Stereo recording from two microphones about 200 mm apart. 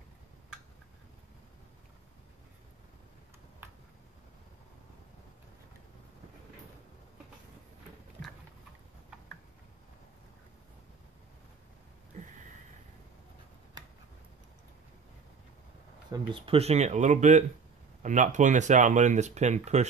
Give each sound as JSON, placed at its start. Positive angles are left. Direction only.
{"t": 16.1, "sound": "speech", "side_deg": -25}